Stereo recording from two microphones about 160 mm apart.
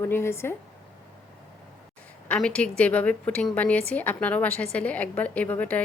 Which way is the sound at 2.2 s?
5° left (ahead or behind).